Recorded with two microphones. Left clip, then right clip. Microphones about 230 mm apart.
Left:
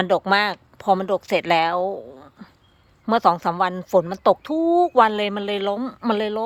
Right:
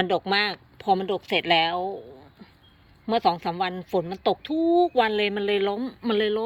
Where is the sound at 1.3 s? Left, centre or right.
Left.